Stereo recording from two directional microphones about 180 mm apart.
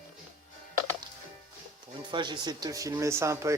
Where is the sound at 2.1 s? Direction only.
25° right (ahead or behind).